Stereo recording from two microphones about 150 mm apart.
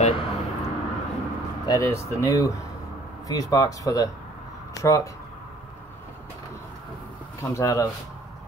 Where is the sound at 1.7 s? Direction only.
20° left (ahead or behind).